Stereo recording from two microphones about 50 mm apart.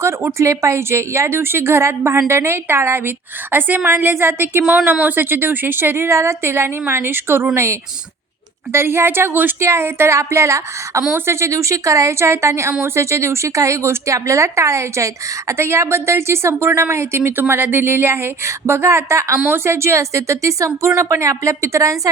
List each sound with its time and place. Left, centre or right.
0.3 s a woman's voice: right
7.5 s a woman's voice: right
9.6 s speech: right
11.3 s speech: right
17.5 s a woman's voice: right
19.5 s speech: right